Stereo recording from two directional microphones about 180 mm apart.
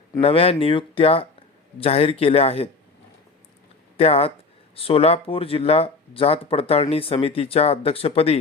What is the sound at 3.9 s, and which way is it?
Speech, 35° left (ahead or behind).